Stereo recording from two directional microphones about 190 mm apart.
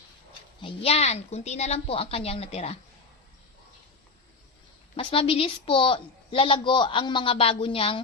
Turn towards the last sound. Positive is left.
turn(degrees=30)  # may be behind; listen again after turning